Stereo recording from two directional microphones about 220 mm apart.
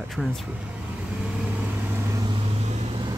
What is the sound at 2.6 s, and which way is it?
Vehicle, 30° right (ahead or behind).